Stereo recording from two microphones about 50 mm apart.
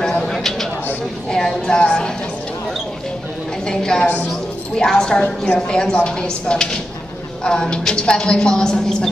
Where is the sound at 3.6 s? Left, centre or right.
Centre.